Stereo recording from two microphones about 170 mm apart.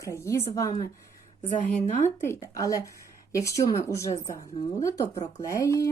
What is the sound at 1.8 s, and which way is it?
Speech, 40° left (ahead or behind).